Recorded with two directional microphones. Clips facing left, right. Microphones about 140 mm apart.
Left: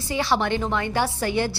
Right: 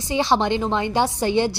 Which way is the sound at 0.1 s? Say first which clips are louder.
Right 3 dB; 20° right (ahead or behind).